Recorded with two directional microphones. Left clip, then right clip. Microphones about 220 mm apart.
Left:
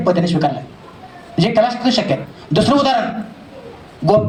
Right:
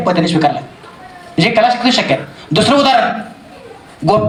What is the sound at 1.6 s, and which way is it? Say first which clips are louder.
A man's voice: right 3 dB; 35° left (ahead or behind).